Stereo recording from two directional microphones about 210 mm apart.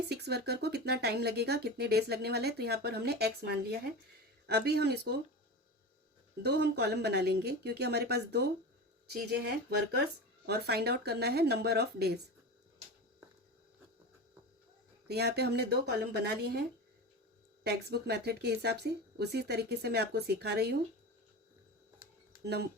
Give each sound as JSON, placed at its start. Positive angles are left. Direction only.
{"t": 0.1, "sound": "speech", "side_deg": -50}
{"t": 6.4, "sound": "speech", "side_deg": -50}
{"t": 15.0, "sound": "speech", "side_deg": -50}
{"t": 22.4, "sound": "speech", "side_deg": -50}